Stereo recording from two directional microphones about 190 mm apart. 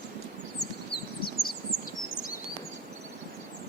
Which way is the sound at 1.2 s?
50° left (ahead or behind).